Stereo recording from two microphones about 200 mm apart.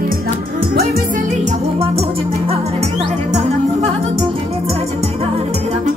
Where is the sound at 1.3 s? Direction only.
30° right (ahead or behind).